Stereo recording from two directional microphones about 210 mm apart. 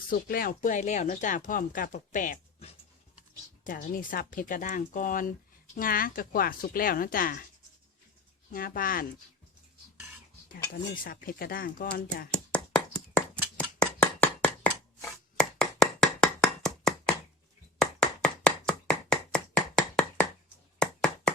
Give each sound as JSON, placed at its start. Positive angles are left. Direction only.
{"t": 0.1, "sound": "speech", "side_deg": 45}
{"t": 8.5, "sound": "speech", "side_deg": 45}
{"t": 10.7, "sound": "speech", "side_deg": 45}
{"t": 12.3, "sound": "a sound", "side_deg": 5}
{"t": 17.7, "sound": "chopping", "side_deg": 5}
{"t": 20.7, "sound": "a sound", "side_deg": 5}